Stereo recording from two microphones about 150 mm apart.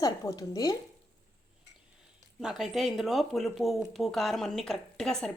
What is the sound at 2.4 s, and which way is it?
Speech, centre (ahead or behind).